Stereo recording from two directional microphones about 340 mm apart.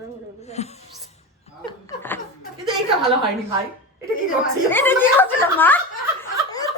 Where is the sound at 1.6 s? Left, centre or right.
Centre.